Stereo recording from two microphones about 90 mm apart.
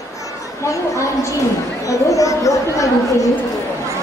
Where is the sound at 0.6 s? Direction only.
35° left (ahead or behind).